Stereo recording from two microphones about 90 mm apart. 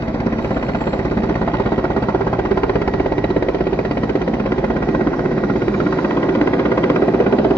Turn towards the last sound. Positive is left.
turn(degrees=30)  # may be behind; listen again after turning